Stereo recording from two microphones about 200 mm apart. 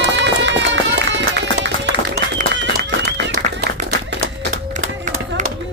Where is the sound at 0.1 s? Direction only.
60° right (ahead or behind).